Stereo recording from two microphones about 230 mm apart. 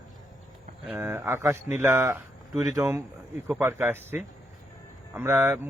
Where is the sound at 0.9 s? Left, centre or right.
Centre.